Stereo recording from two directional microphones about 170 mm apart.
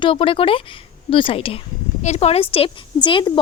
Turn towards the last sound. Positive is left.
turn(degrees=30)  # may be behind; listen again after turning